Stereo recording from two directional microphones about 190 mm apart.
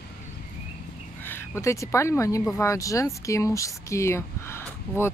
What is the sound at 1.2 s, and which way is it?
Speech, 15° left (ahead or behind).